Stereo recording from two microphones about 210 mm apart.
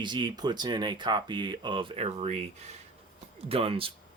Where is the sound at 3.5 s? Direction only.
25° right (ahead or behind).